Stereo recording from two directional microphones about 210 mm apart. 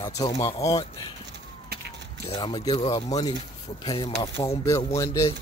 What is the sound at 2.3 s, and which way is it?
Speech, 20° left (ahead or behind).